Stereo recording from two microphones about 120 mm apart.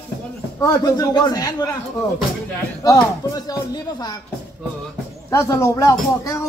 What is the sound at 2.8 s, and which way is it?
Speech, 35° left (ahead or behind).